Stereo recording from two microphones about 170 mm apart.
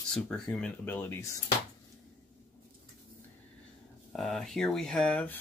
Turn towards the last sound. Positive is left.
turn(degrees=5)  # may be behind; listen again after turning